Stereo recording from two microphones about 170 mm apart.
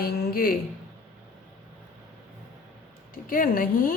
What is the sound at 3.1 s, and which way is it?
Speech, 55° left (ahead or behind).